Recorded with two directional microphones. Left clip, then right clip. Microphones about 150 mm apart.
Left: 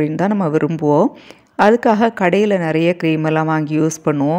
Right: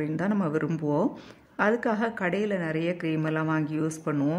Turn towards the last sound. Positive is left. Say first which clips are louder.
# left 13 dB
turn(degrees=45)  # may be behind; listen again after turning